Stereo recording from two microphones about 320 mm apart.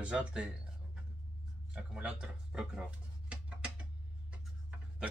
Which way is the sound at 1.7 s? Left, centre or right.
Centre.